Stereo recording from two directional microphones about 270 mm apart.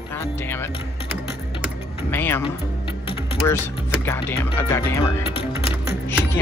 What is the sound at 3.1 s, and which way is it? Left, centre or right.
Music, centre.